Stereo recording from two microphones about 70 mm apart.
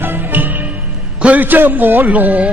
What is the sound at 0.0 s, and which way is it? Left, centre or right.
Music, right.